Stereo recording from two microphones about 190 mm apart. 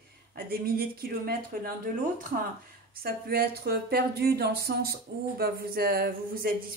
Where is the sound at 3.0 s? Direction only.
55° right (ahead or behind).